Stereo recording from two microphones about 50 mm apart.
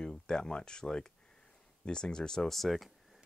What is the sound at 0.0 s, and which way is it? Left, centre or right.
Speech, centre.